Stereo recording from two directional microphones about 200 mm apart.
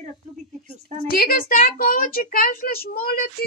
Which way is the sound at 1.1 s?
45° left (ahead or behind).